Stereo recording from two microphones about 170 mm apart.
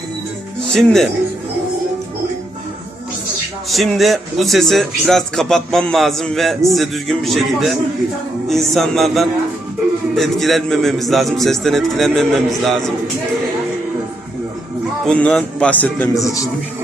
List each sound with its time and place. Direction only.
0.7 s a man's voice: centre (ahead or behind)
3.7 s a man's voice: centre (ahead or behind)
15.0 s a man's voice: 5° left (ahead or behind)
16.1 s a man's voice: 20° left (ahead or behind)